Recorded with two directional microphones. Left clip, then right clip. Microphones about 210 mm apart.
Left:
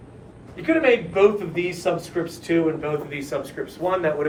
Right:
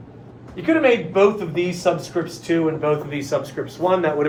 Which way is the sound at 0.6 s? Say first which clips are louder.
Right 2 dB; 15° right (ahead or behind).